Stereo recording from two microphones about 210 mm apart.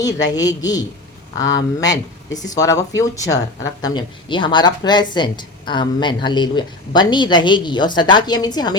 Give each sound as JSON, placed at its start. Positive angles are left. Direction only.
{"t": 0.0, "sound": "a woman's voice", "side_deg": 15}